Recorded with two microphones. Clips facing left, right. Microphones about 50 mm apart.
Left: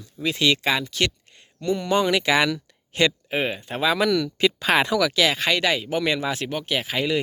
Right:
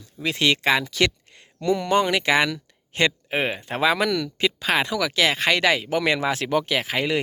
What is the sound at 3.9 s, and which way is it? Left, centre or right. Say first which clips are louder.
Speech: left 3 dB; right.